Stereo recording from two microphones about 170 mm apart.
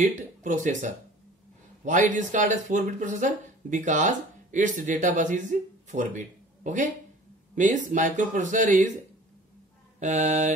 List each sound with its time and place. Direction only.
0.0 s speech: 45° right (ahead or behind)
9.9 s speech: 45° right (ahead or behind)